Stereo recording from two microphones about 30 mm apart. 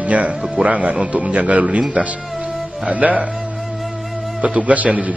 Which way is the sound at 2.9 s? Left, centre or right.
Right.